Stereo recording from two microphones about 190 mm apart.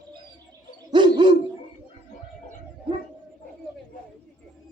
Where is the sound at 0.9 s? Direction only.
25° right (ahead or behind).